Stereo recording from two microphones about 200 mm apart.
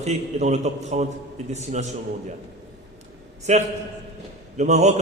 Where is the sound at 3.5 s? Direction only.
35° right (ahead or behind).